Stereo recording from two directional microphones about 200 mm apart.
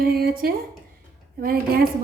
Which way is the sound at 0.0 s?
50° right (ahead or behind).